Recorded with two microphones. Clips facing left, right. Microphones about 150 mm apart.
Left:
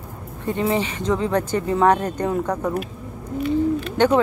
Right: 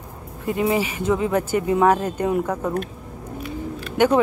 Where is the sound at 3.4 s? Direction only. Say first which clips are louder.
Left 11 dB; 5° right (ahead or behind).